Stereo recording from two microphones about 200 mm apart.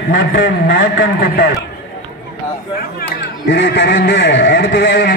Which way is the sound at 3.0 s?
55° left (ahead or behind).